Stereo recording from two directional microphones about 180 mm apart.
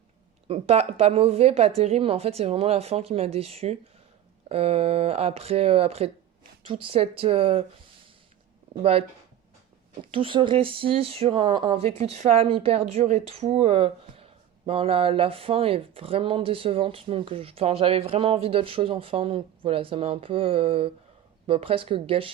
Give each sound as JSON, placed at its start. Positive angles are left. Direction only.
{"t": 0.4, "sound": "speech", "side_deg": -35}
{"t": 8.8, "sound": "speech", "side_deg": -35}
{"t": 10.1, "sound": "speech", "side_deg": -30}